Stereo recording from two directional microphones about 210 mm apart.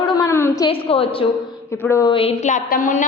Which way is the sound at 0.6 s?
25° left (ahead or behind).